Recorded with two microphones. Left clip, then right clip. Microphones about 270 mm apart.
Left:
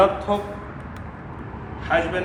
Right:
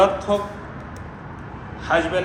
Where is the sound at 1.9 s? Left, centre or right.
Centre.